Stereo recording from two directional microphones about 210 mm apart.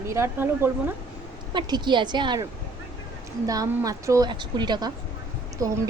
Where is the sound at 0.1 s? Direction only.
10° right (ahead or behind).